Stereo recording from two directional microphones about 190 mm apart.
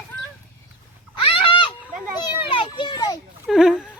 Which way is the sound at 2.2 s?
25° left (ahead or behind).